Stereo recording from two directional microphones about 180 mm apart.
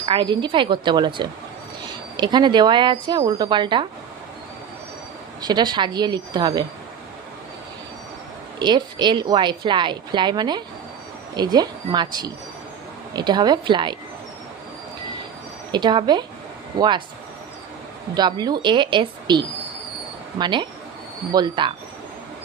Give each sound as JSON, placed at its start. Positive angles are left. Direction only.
{"t": 0.0, "sound": "a woman's voice", "side_deg": -25}
{"t": 5.4, "sound": "a woman's voice", "side_deg": -25}
{"t": 8.5, "sound": "a woman's voice", "side_deg": -25}
{"t": 15.7, "sound": "a woman's voice", "side_deg": -25}
{"t": 18.1, "sound": "a woman's voice", "side_deg": -25}